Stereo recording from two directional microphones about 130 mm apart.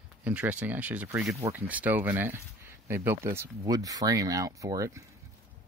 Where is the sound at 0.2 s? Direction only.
10° right (ahead or behind).